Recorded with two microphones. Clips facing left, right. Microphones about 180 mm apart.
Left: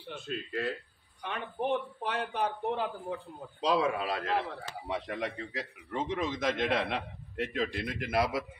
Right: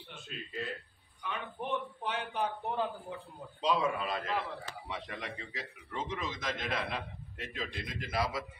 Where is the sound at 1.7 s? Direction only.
65° left (ahead or behind).